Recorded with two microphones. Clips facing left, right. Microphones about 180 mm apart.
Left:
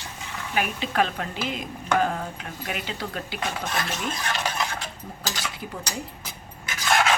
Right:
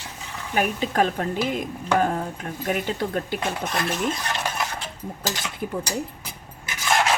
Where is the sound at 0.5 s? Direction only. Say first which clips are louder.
Right 3 dB; 40° right (ahead or behind).